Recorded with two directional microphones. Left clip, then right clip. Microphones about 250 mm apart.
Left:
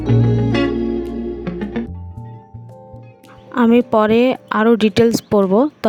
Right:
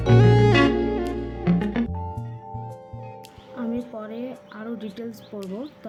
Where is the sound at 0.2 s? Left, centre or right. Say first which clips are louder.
Right 2 dB; centre.